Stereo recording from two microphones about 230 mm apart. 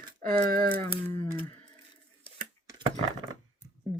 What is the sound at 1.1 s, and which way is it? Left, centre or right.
Speech, right.